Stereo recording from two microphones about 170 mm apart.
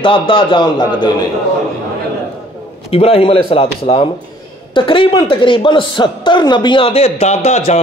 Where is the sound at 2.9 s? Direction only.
35° left (ahead or behind).